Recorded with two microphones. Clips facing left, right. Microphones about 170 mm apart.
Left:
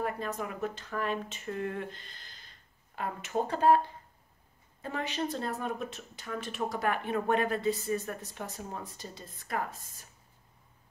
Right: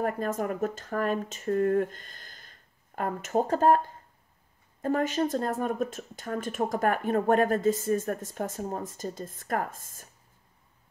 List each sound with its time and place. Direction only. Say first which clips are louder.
0.0 s a woman's voice: right 5 dB; 45° right (ahead or behind)